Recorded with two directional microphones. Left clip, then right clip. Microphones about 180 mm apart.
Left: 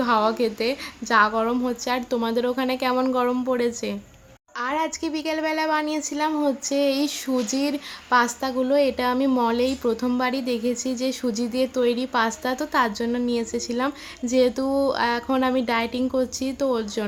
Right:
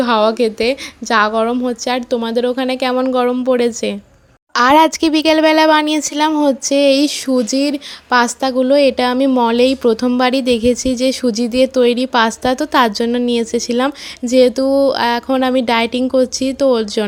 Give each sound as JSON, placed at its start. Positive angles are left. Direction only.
{"t": 0.0, "sound": "speech", "side_deg": -35}
{"t": 4.5, "sound": "speech", "side_deg": -60}